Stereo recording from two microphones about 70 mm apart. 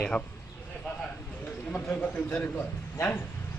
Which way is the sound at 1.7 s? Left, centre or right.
Left.